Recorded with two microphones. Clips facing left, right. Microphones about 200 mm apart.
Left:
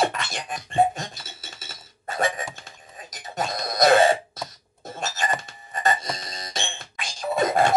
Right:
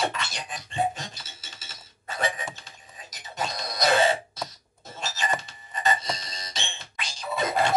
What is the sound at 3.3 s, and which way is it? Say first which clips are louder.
Doorbell: left 4 dB; 50° left (ahead or behind).